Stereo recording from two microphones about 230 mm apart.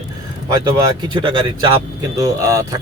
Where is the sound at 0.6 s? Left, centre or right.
Centre.